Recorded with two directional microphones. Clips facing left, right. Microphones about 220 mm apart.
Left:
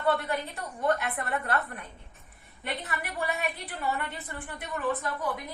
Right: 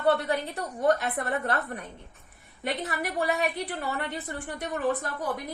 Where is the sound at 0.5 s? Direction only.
35° right (ahead or behind).